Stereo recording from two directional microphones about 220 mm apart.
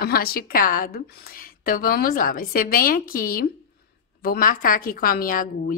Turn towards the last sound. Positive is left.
turn(degrees=40)  # may be behind; listen again after turning